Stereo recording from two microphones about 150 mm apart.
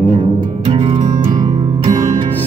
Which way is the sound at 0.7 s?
45° right (ahead or behind).